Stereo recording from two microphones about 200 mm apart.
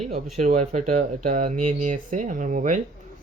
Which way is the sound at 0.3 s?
35° right (ahead or behind).